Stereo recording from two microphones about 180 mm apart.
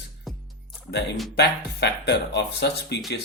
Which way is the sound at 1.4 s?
70° left (ahead or behind).